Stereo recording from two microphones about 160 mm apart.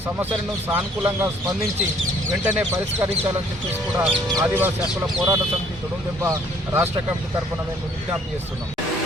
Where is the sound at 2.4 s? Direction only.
10° right (ahead or behind).